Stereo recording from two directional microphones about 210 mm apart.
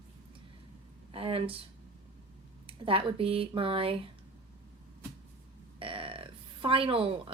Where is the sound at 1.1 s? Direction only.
25° right (ahead or behind).